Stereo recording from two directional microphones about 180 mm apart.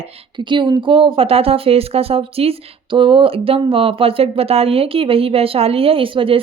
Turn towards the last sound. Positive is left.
turn(degrees=-30)  # may be behind; listen again after turning